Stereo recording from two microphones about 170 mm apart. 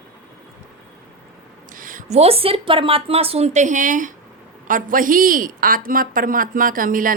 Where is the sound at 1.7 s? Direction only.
50° right (ahead or behind).